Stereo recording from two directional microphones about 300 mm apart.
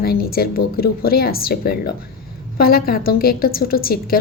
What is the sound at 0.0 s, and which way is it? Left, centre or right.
A woman's voice, left.